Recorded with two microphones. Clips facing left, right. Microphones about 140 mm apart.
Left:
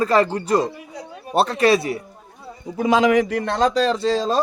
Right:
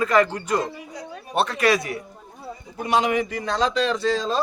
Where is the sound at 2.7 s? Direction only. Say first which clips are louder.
Left 5 dB; 90° left; by 4.3 s 35° left (ahead or behind).